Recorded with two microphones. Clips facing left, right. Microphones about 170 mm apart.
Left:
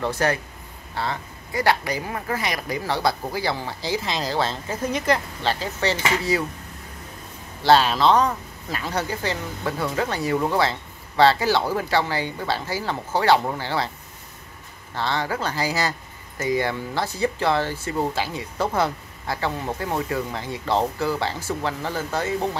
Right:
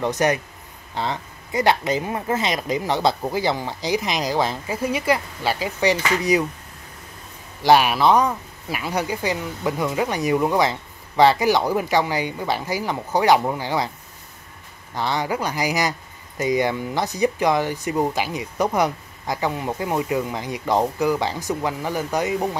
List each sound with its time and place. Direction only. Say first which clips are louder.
0.0 s speech: right 3 dB; 15° right (ahead or behind)
7.6 s speech: right 1 dB; 15° right (ahead or behind)
15.0 s speech: right 2 dB; 15° right (ahead or behind)